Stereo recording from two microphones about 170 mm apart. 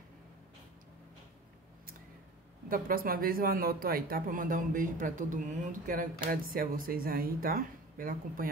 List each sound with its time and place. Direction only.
2.7 s speech: 60° right (ahead or behind)